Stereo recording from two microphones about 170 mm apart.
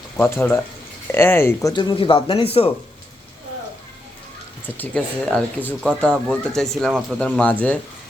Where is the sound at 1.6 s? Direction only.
30° left (ahead or behind).